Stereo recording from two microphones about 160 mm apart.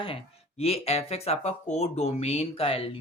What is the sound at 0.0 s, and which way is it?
Speech, 35° left (ahead or behind).